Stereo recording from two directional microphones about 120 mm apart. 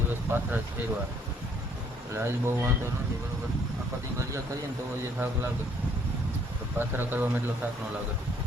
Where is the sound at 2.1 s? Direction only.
20° right (ahead or behind).